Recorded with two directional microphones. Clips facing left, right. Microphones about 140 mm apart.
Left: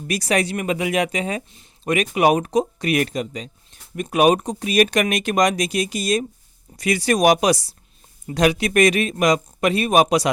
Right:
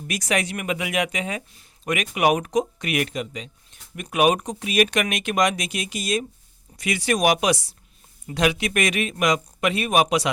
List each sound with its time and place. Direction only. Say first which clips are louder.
0.1 s speech: left 4 dB; 35° left (ahead or behind)